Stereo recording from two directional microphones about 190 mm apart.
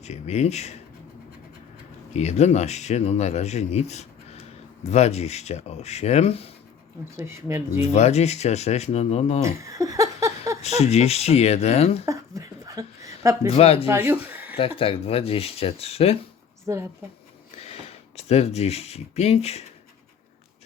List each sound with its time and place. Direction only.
0.0 s speech: 35° left (ahead or behind)
2.1 s speech: 35° left (ahead or behind)
7.3 s speech: 15° right (ahead or behind)
7.8 s speech: 35° left (ahead or behind)
9.4 s a sound: 15° right (ahead or behind)
10.8 s speech: 35° left (ahead or behind)
12.0 s a sound: 15° right (ahead or behind)
13.5 s speech: 30° left (ahead or behind)
13.8 s speech: 10° right (ahead or behind)
14.8 s speech: 30° left (ahead or behind)
16.7 s speech: 15° right (ahead or behind)
17.6 s speech: 35° left (ahead or behind)